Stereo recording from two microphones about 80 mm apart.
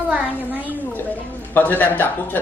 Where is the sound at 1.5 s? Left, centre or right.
Left.